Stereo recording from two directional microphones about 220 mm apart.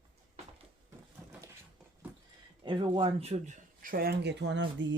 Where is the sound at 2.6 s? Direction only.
20° right (ahead or behind).